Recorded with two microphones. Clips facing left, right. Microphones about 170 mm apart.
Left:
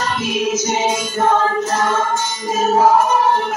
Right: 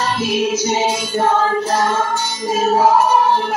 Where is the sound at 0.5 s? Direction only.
30° right (ahead or behind).